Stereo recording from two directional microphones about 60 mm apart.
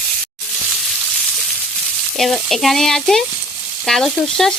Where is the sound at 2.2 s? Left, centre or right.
Centre.